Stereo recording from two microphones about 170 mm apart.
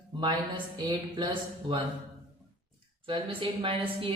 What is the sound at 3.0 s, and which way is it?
A woman's voice, 30° right (ahead or behind).